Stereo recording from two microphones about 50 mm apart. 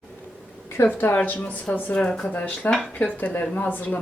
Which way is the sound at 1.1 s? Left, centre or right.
Left.